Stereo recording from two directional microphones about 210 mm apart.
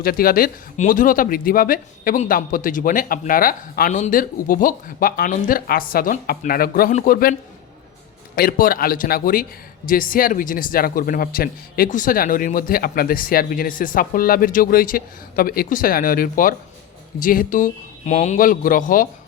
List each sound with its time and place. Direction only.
0.0 s a man's voice: 45° left (ahead or behind)
8.4 s a man's voice: 45° left (ahead or behind)